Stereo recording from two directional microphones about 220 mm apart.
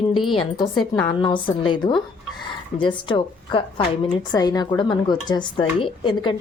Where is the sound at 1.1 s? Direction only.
20° left (ahead or behind).